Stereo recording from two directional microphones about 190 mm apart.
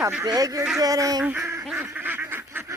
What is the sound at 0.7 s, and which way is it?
Fowl, 15° right (ahead or behind).